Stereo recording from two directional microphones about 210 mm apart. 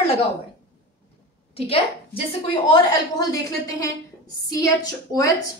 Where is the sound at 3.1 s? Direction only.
15° left (ahead or behind).